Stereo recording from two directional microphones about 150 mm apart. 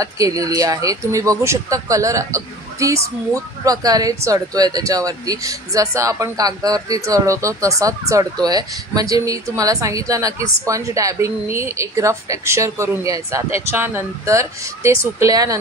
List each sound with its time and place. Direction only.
0.0 s speech: 20° right (ahead or behind)